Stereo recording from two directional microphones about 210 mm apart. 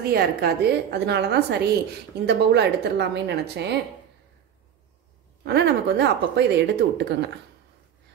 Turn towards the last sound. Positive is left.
turn(degrees=-55)  # may be behind; listen again after turning